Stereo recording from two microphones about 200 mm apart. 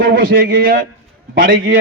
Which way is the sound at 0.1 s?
45° right (ahead or behind).